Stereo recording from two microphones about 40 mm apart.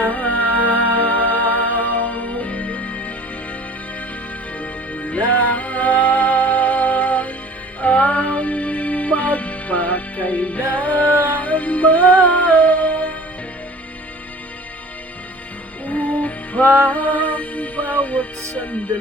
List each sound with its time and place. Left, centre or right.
0.0 s music: left
4.6 s music: left
15.9 s music: left
18.5 s speech: left